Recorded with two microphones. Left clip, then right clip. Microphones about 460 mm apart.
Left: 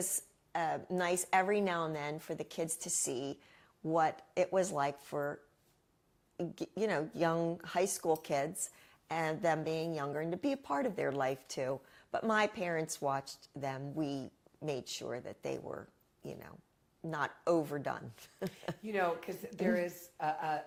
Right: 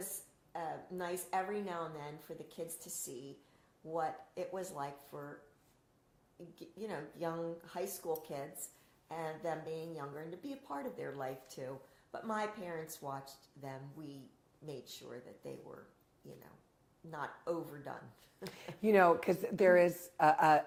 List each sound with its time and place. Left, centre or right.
0.5 s a woman's voice: left
3.9 s a woman's voice: left
6.3 s a woman's voice: left
17.1 s a woman's voice: left
18.8 s a woman's voice: right